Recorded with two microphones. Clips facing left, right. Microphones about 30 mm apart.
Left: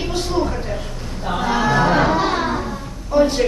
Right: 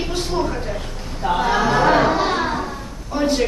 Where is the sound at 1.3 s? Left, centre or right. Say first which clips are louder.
Even; centre.